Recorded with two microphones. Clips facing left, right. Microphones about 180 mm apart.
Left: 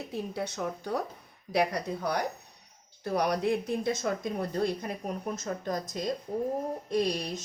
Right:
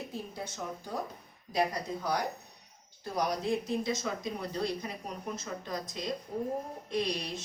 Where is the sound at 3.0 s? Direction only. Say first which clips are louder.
Left 4 dB; 60° left (ahead or behind).